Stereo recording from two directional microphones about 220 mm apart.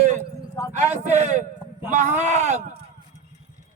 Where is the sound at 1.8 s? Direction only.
35° right (ahead or behind).